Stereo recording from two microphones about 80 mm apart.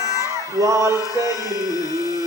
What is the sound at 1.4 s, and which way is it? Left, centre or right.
Music, right.